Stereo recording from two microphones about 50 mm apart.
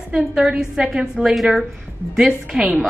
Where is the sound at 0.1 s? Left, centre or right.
Centre.